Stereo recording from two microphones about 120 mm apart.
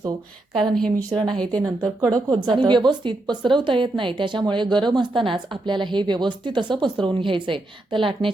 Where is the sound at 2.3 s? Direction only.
40° right (ahead or behind).